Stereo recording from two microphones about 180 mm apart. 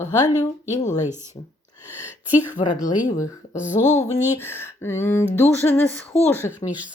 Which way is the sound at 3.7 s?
40° left (ahead or behind).